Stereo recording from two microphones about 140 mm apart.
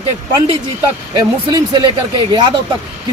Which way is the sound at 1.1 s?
35° right (ahead or behind).